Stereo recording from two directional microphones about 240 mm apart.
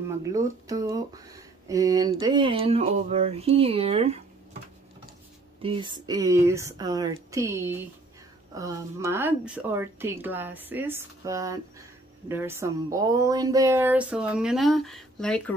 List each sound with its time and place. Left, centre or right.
0.2 s speech: centre
5.6 s a woman's voice: right; by 15.5 s centre